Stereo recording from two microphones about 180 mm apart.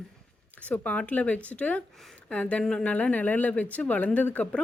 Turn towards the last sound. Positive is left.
turn(degrees=5)  # may be behind; listen again after turning